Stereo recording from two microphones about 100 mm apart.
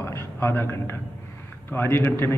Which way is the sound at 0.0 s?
25° left (ahead or behind).